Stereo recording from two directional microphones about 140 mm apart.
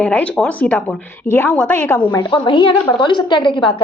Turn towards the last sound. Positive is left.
turn(degrees=35)  # may be behind; listen again after turning